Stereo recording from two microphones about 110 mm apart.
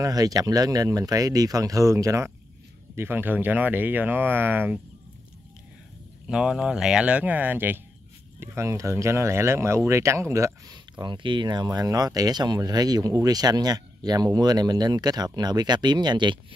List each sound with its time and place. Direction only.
0.0 s speech: 35° right (ahead or behind)
6.2 s speech: 5° right (ahead or behind); by 10.5 s 25° right (ahead or behind)
10.7 s speech: 40° right (ahead or behind)